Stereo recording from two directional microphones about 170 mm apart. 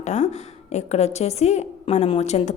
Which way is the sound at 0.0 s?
45° left (ahead or behind).